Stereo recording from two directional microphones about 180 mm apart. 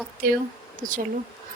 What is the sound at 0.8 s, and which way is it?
Speech, 45° right (ahead or behind).